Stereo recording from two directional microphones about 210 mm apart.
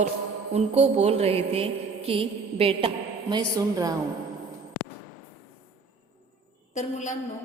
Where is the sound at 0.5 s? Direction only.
30° right (ahead or behind).